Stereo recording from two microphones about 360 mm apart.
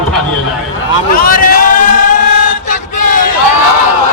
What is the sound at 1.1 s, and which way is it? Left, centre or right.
Sheep, left.